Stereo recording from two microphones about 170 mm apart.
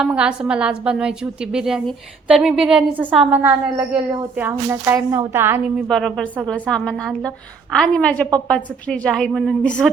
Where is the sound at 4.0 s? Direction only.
25° right (ahead or behind).